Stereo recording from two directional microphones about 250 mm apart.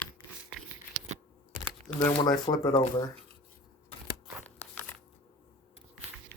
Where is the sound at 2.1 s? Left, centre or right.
Centre.